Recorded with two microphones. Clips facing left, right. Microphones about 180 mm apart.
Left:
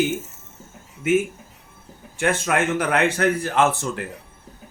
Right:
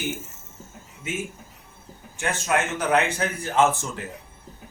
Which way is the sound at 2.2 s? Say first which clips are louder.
Left 4 dB; 55° left (ahead or behind).